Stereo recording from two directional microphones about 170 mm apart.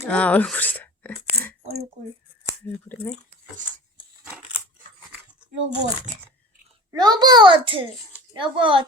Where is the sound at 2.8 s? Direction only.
10° left (ahead or behind).